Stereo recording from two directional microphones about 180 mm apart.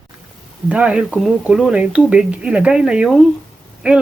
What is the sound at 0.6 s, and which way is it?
Speech, 5° right (ahead or behind).